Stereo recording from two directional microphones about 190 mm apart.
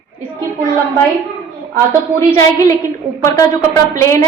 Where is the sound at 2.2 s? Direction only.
15° left (ahead or behind).